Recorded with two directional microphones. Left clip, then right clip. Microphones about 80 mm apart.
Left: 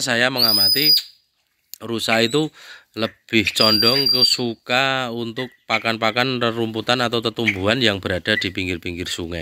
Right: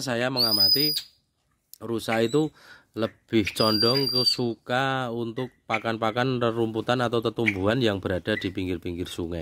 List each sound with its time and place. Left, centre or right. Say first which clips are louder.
0.0 s speech: left 7 dB; centre